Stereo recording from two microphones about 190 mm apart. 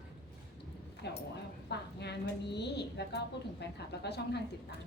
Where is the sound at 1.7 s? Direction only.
60° left (ahead or behind).